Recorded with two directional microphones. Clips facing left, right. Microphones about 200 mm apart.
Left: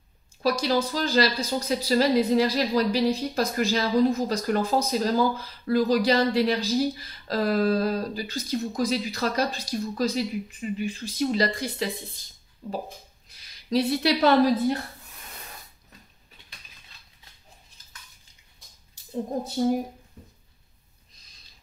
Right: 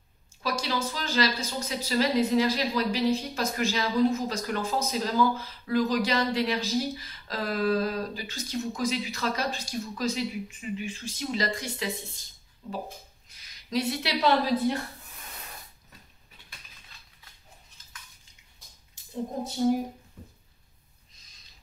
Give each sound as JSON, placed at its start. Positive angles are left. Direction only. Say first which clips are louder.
{"t": 0.4, "sound": "a woman's voice", "louder": "left 6 dB", "side_deg": 40}
{"t": 14.2, "sound": "a woman's voice", "louder": "left 3 dB", "side_deg": 45}